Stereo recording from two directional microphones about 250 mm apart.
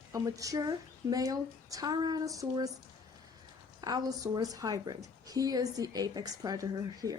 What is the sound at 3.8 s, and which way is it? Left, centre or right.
Speech, centre.